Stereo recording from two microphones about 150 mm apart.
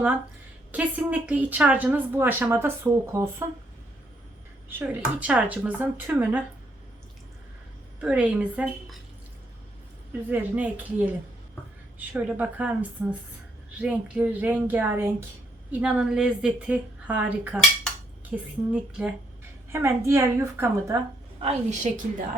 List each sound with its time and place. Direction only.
0.7 s a woman's voice: 10° right (ahead or behind)
4.7 s a woman's voice: 10° right (ahead or behind)
8.0 s a woman's voice: 5° right (ahead or behind)
10.1 s a woman's voice: 10° right (ahead or behind)
21.4 s a woman's voice: 50° right (ahead or behind)